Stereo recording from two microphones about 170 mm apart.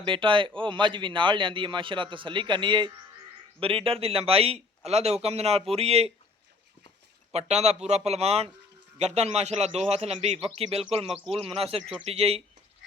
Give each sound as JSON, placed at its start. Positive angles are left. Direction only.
{"t": 0.0, "sound": "a man's voice", "side_deg": -30}
{"t": 7.3, "sound": "a man's voice", "side_deg": -40}
{"t": 11.8, "sound": "a man's voice", "side_deg": 0}
{"t": 12.0, "sound": "a man's voice", "side_deg": -35}